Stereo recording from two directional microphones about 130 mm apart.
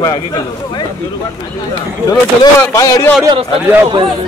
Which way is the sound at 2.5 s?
25° left (ahead or behind).